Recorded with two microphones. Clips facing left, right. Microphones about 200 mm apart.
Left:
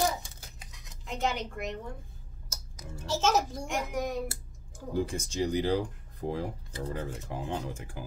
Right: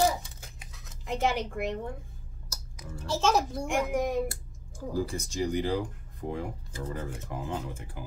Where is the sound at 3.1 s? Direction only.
5° left (ahead or behind).